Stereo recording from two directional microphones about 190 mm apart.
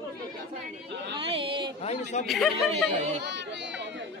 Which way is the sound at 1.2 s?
30° right (ahead or behind).